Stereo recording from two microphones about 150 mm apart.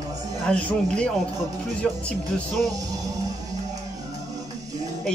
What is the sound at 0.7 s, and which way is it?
Speech, 5° left (ahead or behind).